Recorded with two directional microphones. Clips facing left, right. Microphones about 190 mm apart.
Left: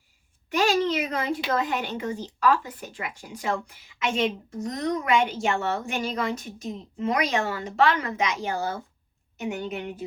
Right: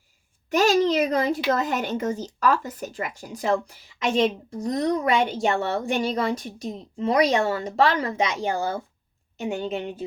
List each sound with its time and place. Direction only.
0.5 s a woman's voice: 40° right (ahead or behind)